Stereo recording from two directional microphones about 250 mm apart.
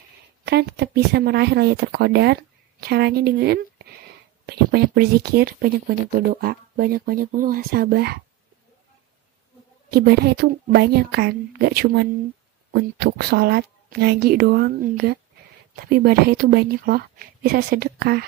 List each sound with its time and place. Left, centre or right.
0.5 s speech: right
9.8 s speech: right